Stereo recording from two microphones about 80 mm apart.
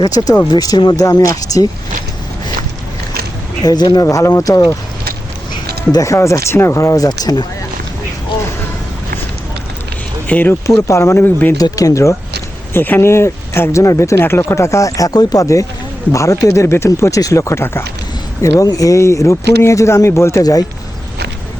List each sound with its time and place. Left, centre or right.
0.0 s speech: left
3.6 s speech: left
4.0 s speech: left
5.9 s speech: left
6.8 s speech: left
10.2 s speech: left
10.8 s speech: left
11.5 s speech: left
12.7 s speech: left
20.4 s speech: left